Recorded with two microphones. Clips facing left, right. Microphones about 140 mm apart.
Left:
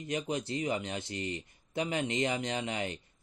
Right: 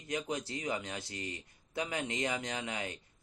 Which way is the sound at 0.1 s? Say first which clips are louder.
Left 3 dB; 25° left (ahead or behind).